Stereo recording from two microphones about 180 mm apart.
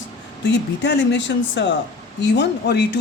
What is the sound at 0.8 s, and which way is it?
Speech, 75° left (ahead or behind).